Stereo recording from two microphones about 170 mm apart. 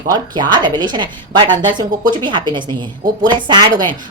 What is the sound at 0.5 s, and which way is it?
Speech, 25° right (ahead or behind).